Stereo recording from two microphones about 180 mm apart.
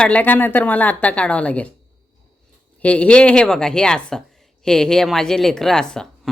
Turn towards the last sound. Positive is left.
turn(degrees=5)  # may be behind; listen again after turning